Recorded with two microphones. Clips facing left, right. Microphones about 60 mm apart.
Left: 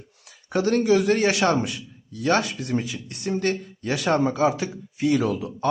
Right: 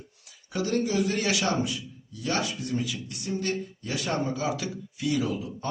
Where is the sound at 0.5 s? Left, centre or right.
Left.